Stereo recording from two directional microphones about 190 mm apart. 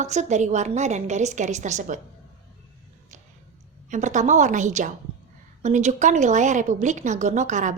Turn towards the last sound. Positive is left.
turn(degrees=-40)  # may be behind; listen again after turning